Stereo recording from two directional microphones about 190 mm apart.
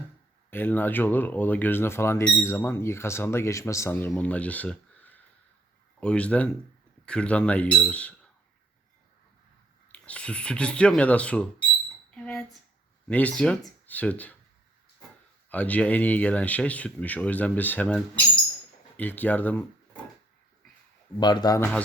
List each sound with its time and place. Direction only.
0.5 s speech: 10° left (ahead or behind)
9.9 s speech: 5° left (ahead or behind)
12.1 s a sound: 5° left (ahead or behind)
13.1 s speech: 5° left (ahead or behind)
15.4 s speech: 10° left (ahead or behind)
21.2 s speech: 20° left (ahead or behind)